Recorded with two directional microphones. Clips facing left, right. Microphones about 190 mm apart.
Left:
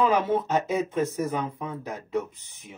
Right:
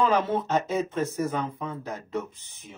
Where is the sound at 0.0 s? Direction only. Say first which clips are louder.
Left 1 dB; 10° left (ahead or behind).